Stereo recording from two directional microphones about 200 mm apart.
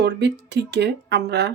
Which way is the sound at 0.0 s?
55° right (ahead or behind).